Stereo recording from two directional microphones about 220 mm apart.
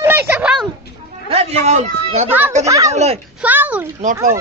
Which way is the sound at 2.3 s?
10° right (ahead or behind).